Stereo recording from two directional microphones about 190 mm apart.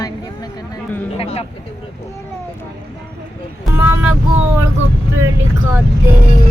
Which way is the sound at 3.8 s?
10° right (ahead or behind).